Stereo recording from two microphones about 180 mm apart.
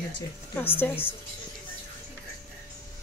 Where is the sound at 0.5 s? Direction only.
10° left (ahead or behind).